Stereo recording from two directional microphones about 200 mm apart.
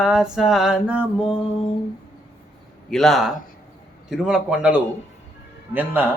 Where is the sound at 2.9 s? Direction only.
Centre (ahead or behind).